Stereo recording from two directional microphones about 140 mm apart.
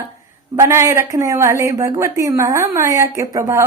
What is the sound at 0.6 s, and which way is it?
Speech, 20° right (ahead or behind).